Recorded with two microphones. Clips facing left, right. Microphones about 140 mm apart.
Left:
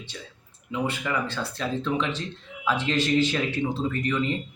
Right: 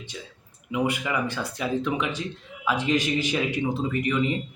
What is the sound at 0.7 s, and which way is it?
Speech, 15° right (ahead or behind).